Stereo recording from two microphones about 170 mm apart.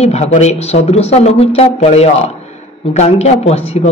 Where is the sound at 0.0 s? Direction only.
40° left (ahead or behind).